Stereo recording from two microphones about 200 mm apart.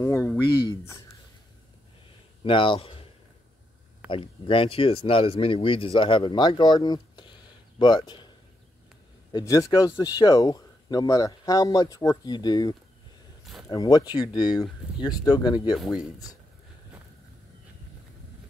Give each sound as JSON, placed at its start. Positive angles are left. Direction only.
{"t": 0.0, "sound": "speech", "side_deg": 15}
{"t": 2.4, "sound": "speech", "side_deg": 25}
{"t": 4.1, "sound": "speech", "side_deg": 25}
{"t": 9.3, "sound": "speech", "side_deg": 15}
{"t": 15.8, "sound": "speech", "side_deg": 0}